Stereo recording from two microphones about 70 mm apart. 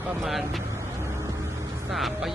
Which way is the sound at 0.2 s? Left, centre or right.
Centre.